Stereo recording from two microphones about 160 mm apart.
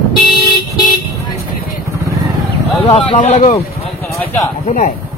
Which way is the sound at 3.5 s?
20° left (ahead or behind).